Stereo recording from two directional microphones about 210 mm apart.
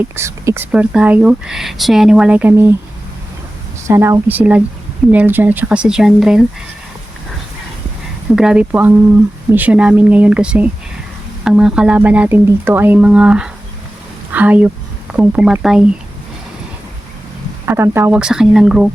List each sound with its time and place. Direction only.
0.0 s speech: 10° right (ahead or behind)
3.8 s speech: 15° right (ahead or behind)
8.4 s speech: 5° right (ahead or behind)
17.7 s speech: 10° right (ahead or behind)